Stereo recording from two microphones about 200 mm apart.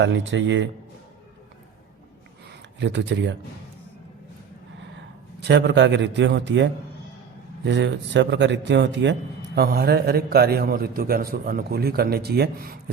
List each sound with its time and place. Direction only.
0.0 s speech: 70° right (ahead or behind)
2.5 s speech: 65° right (ahead or behind)
5.4 s a man's voice: 55° right (ahead or behind)
9.6 s a man's voice: 50° right (ahead or behind)